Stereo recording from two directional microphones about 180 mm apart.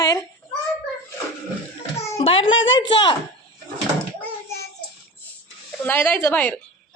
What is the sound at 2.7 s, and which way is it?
Speech, 25° left (ahead or behind).